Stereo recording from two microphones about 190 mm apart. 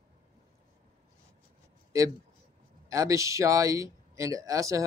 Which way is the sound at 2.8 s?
15° right (ahead or behind).